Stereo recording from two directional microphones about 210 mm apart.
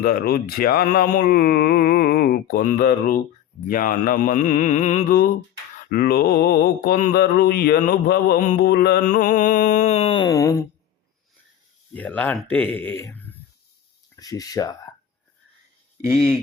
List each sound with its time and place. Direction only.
0.0 s mantra: 45° left (ahead or behind); by 10.6 s 15° left (ahead or behind)
11.9 s speech: 5° left (ahead or behind)